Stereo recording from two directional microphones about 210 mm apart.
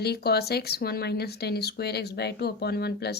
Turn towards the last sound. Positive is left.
turn(degrees=50)  # may be behind; listen again after turning